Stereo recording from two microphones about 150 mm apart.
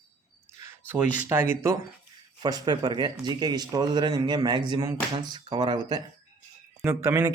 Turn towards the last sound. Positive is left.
turn(degrees=-20)  # may be behind; listen again after turning